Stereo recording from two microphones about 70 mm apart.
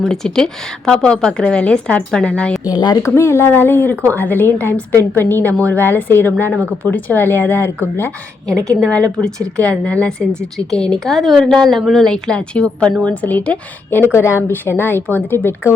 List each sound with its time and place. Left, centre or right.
0.1 s a woman's voice: centre
2.6 s speech: left
3.2 s a woman's voice: left
8.4 s a woman's voice: centre; by 14.0 s left
14.0 s a woman's voice: left